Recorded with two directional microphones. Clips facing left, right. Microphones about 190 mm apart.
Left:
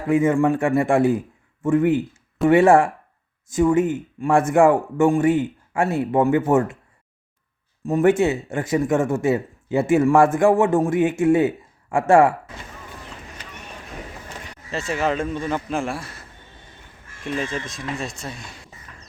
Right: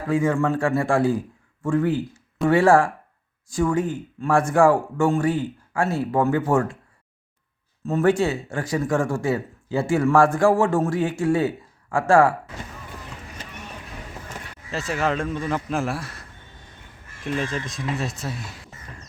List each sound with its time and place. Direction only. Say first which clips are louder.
0.1 s speech: left 4 dB; 20° left (ahead or behind)
7.9 s speech: left 3 dB; 20° left (ahead or behind)
14.7 s a man's voice: left 1 dB; centre (ahead or behind)
17.2 s a man's voice: even; centre (ahead or behind)